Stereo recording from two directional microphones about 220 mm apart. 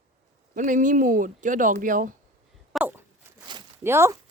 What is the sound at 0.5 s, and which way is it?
Speech, 35° right (ahead or behind).